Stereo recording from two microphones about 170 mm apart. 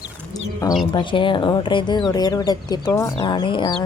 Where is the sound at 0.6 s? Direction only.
20° left (ahead or behind).